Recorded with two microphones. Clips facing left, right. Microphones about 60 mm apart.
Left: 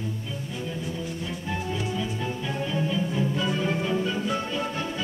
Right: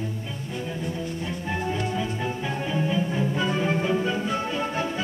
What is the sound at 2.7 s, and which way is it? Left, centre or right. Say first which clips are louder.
Music: right 2 dB; centre.